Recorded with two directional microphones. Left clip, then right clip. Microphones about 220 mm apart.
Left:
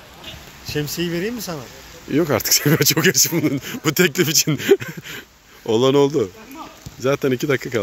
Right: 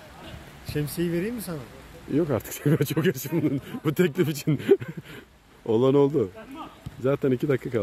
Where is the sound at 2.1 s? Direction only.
10° left (ahead or behind).